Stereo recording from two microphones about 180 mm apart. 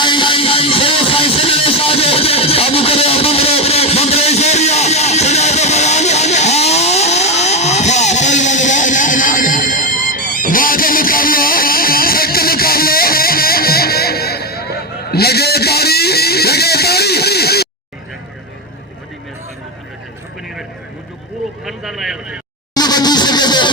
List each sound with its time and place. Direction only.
0.0 s music: 25° left (ahead or behind); by 17.7 s 60° left (ahead or behind)
21.6 s vehicle: centre (ahead or behind)
22.7 s a sound: 20° left (ahead or behind)